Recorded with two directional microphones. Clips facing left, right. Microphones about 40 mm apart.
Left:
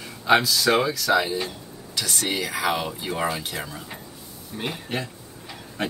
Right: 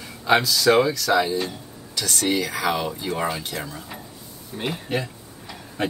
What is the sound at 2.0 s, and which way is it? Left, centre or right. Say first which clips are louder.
Speech: right 3 dB; centre.